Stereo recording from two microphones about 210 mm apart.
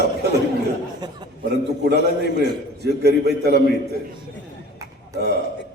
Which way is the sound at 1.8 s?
55° right (ahead or behind).